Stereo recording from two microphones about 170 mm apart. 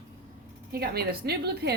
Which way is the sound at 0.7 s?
70° right (ahead or behind).